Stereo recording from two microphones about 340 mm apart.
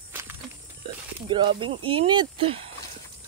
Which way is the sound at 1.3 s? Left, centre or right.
Centre.